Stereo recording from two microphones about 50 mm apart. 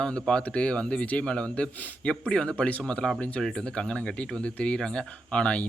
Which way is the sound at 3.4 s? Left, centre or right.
Centre.